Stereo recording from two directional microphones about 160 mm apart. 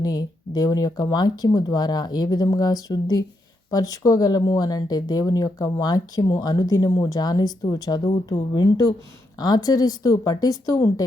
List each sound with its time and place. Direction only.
0.0 s speech: 25° left (ahead or behind)